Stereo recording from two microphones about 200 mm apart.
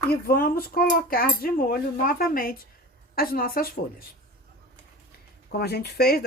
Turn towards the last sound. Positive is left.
turn(degrees=50)  # may be behind; listen again after turning